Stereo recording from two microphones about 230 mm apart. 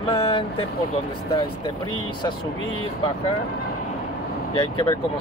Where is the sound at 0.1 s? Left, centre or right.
Left.